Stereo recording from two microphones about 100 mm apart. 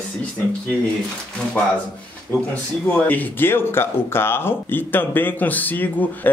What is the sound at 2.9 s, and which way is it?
Speech, 15° left (ahead or behind).